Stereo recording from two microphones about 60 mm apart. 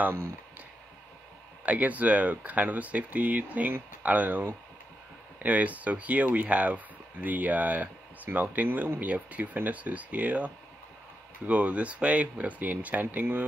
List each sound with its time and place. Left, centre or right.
1.7 s speech: right